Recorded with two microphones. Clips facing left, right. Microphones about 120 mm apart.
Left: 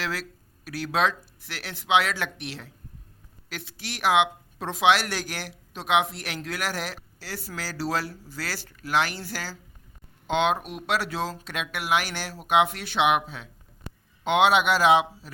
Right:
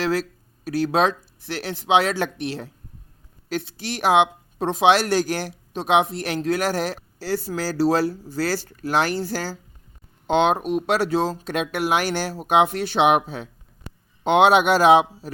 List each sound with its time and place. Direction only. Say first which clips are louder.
0.0 s speech: right 9 dB; 35° right (ahead or behind)